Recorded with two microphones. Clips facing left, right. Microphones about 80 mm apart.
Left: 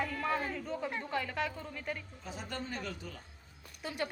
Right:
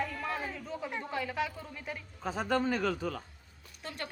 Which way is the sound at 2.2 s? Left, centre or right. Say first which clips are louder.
Right 13 dB; right.